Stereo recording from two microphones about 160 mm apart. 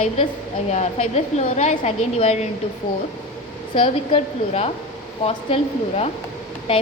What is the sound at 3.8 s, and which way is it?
Speech, 35° left (ahead or behind).